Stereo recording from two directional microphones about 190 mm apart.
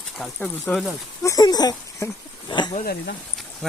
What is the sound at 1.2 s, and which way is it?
Speech, 20° left (ahead or behind).